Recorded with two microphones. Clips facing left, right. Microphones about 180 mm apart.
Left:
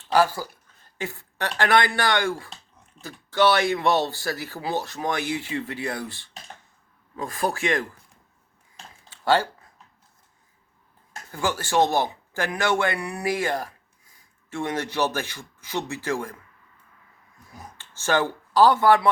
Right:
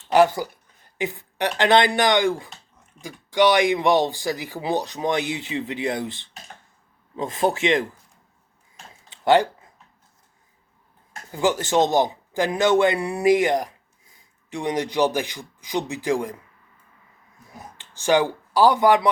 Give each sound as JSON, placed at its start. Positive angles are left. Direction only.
{"t": 0.1, "sound": "speech", "side_deg": -20}
{"t": 9.0, "sound": "a sound", "side_deg": -20}
{"t": 11.3, "sound": "speech", "side_deg": -20}
{"t": 17.7, "sound": "speech", "side_deg": -15}